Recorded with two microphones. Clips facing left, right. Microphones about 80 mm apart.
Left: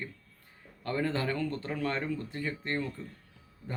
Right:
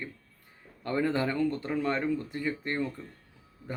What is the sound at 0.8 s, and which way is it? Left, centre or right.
Speech, centre.